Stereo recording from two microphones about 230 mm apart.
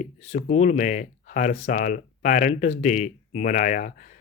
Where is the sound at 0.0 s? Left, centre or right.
Left.